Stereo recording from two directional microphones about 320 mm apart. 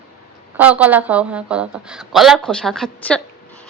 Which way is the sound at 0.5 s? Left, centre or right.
Centre.